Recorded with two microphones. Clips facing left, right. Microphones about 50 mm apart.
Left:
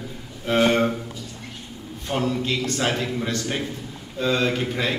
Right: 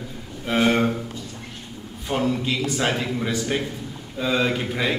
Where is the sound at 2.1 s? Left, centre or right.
Centre.